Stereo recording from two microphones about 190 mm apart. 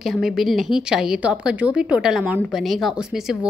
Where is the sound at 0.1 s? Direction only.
Centre (ahead or behind).